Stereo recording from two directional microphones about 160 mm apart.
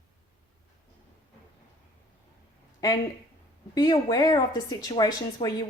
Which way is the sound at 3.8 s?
25° left (ahead or behind).